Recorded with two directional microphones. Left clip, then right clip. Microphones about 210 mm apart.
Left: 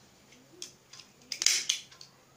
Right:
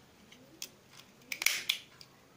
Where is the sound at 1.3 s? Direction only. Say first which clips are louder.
Left 3 dB; 25° right (ahead or behind).